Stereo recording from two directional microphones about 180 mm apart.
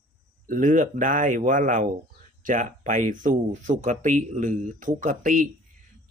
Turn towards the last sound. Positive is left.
turn(degrees=-45)  # may be behind; listen again after turning